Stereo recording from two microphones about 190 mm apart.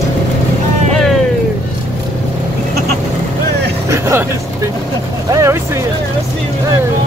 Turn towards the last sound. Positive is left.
turn(degrees=-15)  # may be behind; listen again after turning